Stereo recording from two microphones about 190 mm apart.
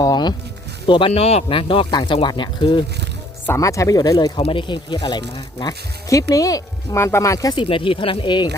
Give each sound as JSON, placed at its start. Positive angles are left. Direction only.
{"t": 0.0, "sound": "music", "side_deg": 20}
{"t": 0.9, "sound": "speech", "side_deg": 25}